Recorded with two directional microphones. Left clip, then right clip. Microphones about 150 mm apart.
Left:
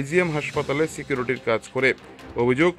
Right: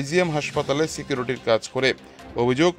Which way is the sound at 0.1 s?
45° right (ahead or behind).